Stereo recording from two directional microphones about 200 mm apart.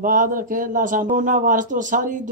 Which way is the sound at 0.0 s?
40° right (ahead or behind).